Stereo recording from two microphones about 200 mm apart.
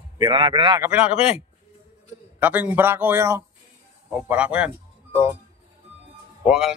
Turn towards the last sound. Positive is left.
turn(degrees=-5)  # may be behind; listen again after turning